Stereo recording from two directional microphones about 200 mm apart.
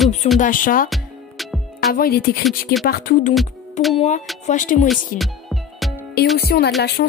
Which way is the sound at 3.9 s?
35° left (ahead or behind).